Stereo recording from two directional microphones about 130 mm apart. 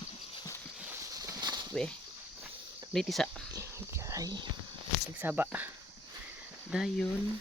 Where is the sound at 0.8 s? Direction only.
20° right (ahead or behind).